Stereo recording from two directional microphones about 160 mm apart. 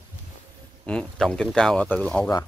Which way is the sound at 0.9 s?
5° left (ahead or behind).